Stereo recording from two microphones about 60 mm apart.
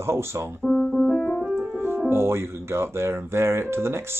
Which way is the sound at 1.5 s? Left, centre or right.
Right.